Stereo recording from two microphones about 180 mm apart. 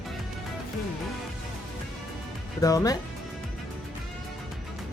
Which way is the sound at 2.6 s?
20° left (ahead or behind).